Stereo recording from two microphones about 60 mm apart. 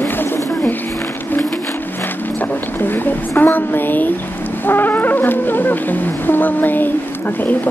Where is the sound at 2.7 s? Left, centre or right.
Left.